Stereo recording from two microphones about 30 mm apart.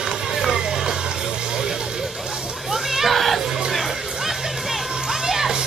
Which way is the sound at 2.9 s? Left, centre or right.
Centre.